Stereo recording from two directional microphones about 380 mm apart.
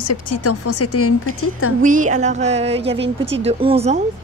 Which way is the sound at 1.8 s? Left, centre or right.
Centre.